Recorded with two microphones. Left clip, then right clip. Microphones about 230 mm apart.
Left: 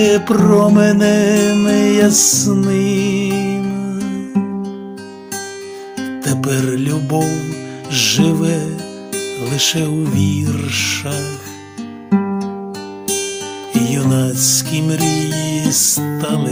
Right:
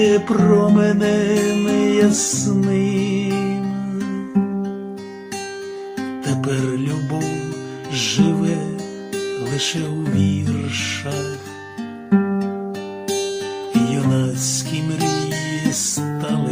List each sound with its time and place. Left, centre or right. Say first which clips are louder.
0.0 s music: left 3 dB; left
6.2 s music: left 4 dB; left
10.2 s music: left 3 dB; left
12.1 s music: left 1 dB; left
13.8 s music: left 3 dB; left